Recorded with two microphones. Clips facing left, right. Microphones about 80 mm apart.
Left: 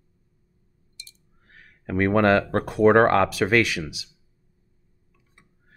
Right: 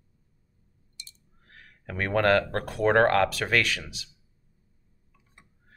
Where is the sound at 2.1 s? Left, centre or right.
Centre.